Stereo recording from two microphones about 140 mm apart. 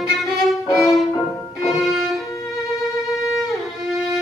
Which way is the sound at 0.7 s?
Centre (ahead or behind).